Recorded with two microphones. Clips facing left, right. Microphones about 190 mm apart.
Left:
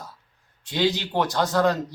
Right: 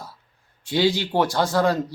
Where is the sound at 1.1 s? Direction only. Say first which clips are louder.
Right 2 dB; 10° right (ahead or behind).